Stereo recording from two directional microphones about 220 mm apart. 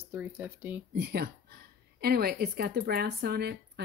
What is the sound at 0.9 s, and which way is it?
Speech, 50° right (ahead or behind).